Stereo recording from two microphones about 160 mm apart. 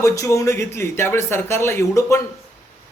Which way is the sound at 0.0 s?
20° left (ahead or behind).